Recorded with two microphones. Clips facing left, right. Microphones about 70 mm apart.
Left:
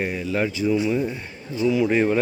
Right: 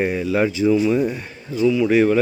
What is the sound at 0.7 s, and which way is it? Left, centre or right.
Speech, centre.